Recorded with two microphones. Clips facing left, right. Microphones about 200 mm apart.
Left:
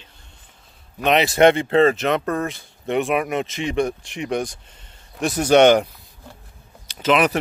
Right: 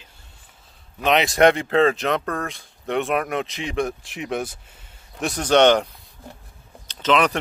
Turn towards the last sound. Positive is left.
turn(degrees=5)  # may be behind; listen again after turning